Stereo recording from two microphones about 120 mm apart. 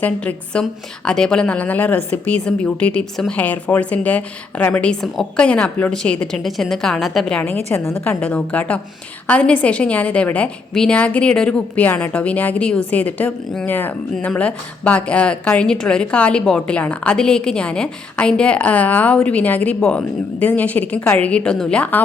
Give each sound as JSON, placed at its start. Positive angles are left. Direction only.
{"t": 0.0, "sound": "speech", "side_deg": 10}
{"t": 7.4, "sound": "a woman's voice", "side_deg": 20}